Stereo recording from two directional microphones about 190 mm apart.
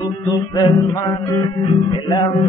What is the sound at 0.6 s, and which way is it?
Music, 20° left (ahead or behind).